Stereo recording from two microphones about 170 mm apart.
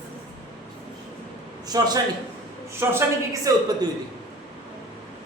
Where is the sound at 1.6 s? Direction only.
25° right (ahead or behind).